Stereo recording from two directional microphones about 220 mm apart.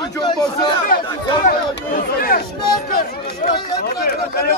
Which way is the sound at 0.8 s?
40° left (ahead or behind).